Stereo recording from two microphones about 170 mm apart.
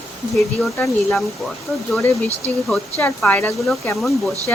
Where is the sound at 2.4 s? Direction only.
10° left (ahead or behind).